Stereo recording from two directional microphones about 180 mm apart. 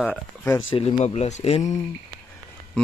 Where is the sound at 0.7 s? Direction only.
35° left (ahead or behind).